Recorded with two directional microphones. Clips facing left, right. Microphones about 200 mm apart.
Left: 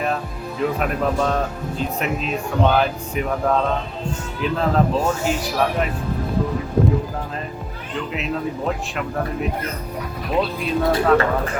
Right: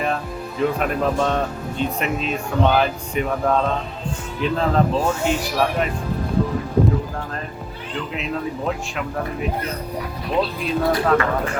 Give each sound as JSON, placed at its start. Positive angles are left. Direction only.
{"t": 0.6, "sound": "speech", "side_deg": 0}
{"t": 8.1, "sound": "speech", "side_deg": 0}